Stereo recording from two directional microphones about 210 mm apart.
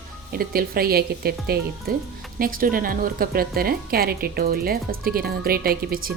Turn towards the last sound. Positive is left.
turn(degrees=-45)  # may be behind; listen again after turning